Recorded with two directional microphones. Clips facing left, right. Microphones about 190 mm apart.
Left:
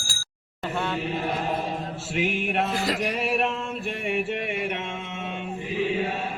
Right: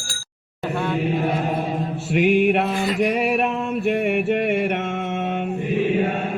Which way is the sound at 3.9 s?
60° right (ahead or behind).